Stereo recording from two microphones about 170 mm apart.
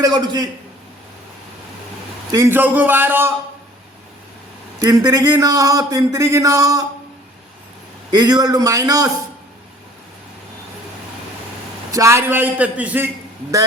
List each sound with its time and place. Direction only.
0.0 s a man's voice: 25° right (ahead or behind)
2.3 s a man's voice: 15° right (ahead or behind)
4.8 s a man's voice: 20° right (ahead or behind)
8.1 s a man's voice: 25° right (ahead or behind)
11.9 s a man's voice: 20° right (ahead or behind)